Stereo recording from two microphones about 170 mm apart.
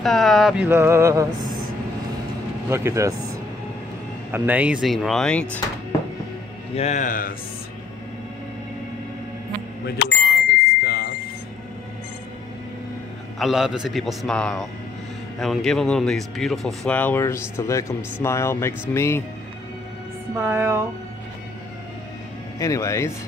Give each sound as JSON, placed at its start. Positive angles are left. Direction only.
{"t": 0.0, "sound": "speech", "side_deg": 0}
{"t": 0.7, "sound": "music", "side_deg": -15}
{"t": 2.7, "sound": "music", "side_deg": -15}
{"t": 4.3, "sound": "music", "side_deg": -10}
{"t": 4.8, "sound": "speech", "side_deg": 0}
{"t": 6.7, "sound": "speech", "side_deg": 40}
{"t": 9.8, "sound": "bicycle bell", "side_deg": 70}
{"t": 13.4, "sound": "speech", "side_deg": 0}
{"t": 20.3, "sound": "music", "side_deg": -15}
{"t": 22.6, "sound": "speech", "side_deg": 20}